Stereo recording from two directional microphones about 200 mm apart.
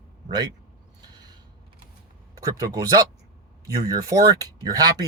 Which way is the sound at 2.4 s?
15° right (ahead or behind).